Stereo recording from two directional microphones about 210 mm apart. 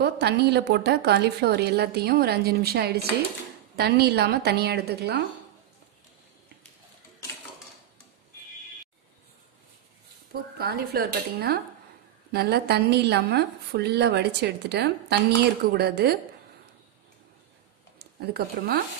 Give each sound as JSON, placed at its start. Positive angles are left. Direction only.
{"t": 0.0, "sound": "a woman's voice", "side_deg": -50}
{"t": 10.6, "sound": "a woman's voice", "side_deg": -50}